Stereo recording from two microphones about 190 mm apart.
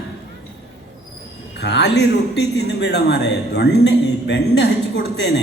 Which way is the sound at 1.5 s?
65° left (ahead or behind).